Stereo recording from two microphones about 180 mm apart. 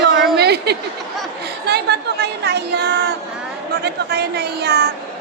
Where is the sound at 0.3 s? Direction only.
65° right (ahead or behind).